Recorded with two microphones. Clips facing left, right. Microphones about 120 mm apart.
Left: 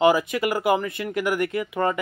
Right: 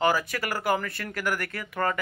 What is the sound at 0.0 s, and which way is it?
Speech, 15° left (ahead or behind).